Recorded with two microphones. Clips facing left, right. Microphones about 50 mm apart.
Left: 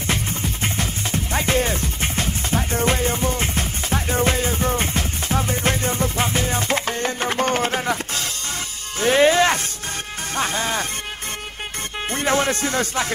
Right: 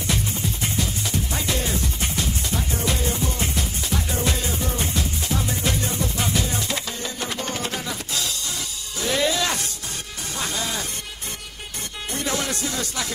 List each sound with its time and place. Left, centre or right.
0.0 s music: left
12.1 s music: left